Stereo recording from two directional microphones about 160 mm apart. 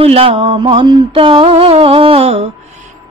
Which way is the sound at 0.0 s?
40° right (ahead or behind).